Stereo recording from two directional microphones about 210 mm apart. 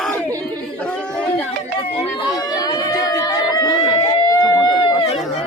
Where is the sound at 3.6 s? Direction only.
20° left (ahead or behind).